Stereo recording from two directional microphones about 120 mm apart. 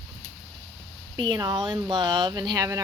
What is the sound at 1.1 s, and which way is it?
Speech, 35° right (ahead or behind).